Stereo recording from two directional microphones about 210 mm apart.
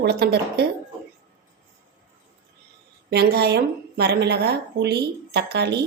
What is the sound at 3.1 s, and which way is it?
A woman's voice, 50° right (ahead or behind).